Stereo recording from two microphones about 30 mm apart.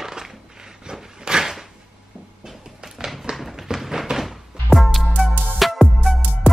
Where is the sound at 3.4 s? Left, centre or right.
Centre.